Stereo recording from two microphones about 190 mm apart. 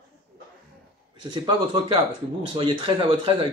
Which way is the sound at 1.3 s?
25° right (ahead or behind).